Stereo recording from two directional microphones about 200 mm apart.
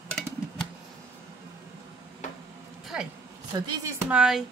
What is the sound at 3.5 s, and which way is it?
Speech, 15° right (ahead or behind).